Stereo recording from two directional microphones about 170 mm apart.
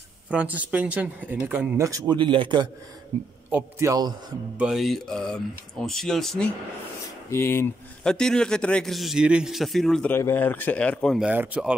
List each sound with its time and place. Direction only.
0.3 s speech: 10° right (ahead or behind)
1.8 s a man's voice: 20° right (ahead or behind)
4.6 s speech: centre (ahead or behind)
7.2 s speech: 15° left (ahead or behind); by 11.7 s 10° right (ahead or behind)